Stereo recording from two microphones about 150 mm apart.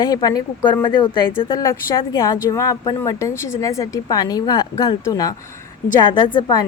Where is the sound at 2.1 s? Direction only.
20° left (ahead or behind).